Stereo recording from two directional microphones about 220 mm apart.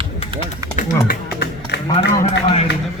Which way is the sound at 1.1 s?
50° left (ahead or behind).